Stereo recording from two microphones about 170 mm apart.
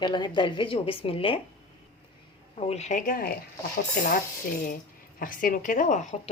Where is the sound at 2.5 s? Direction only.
40° left (ahead or behind); by 3.3 s 55° left (ahead or behind).